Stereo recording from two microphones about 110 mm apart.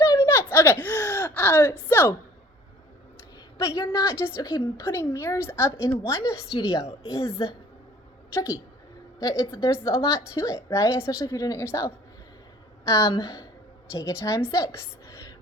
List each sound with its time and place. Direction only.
0.0 s a sound: 30° left (ahead or behind)
1.0 s gasp: 20° left (ahead or behind)
1.9 s a woman's voice: 20° left (ahead or behind)
3.6 s a woman's voice: 30° left (ahead or behind)